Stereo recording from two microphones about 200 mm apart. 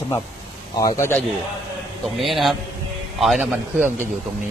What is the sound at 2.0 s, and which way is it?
A man's voice, centre (ahead or behind).